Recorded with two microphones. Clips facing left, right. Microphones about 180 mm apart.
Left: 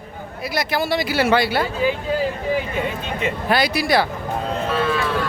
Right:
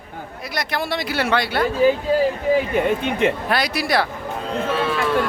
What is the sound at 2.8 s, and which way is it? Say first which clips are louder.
Speech: right 6 dB; 65° right (ahead or behind).